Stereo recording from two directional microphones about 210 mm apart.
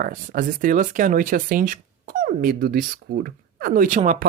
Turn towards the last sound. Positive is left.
turn(degrees=-40)  # may be behind; listen again after turning